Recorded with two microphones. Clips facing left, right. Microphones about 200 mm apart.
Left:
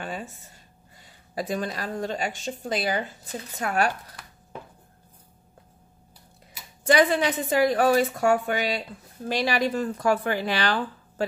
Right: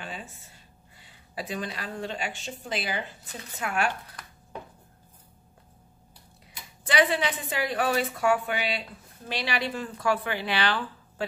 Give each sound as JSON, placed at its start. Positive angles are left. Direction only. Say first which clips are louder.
{"t": 0.0, "sound": "a sound", "louder": "left 6 dB", "side_deg": 50}
{"t": 1.0, "sound": "a woman's voice", "louder": "left 6 dB", "side_deg": 45}
{"t": 6.9, "sound": "a woman's voice", "louder": "left 5 dB", "side_deg": 45}